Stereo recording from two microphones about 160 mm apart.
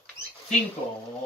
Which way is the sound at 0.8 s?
30° left (ahead or behind).